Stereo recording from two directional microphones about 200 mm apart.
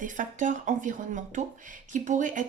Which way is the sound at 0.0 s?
40° right (ahead or behind).